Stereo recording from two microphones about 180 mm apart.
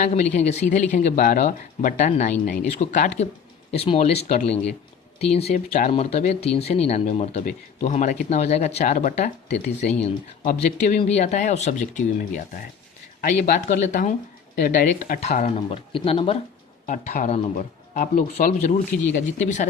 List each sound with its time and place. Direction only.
0.0 s speech: 40° left (ahead or behind)
16.8 s speech: 45° left (ahead or behind)
17.9 s speech: 50° left (ahead or behind)